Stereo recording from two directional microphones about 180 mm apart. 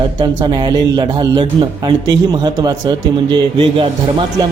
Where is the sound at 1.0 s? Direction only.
25° right (ahead or behind).